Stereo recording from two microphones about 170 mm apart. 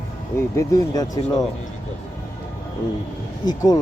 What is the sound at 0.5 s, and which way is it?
Speech, 20° left (ahead or behind).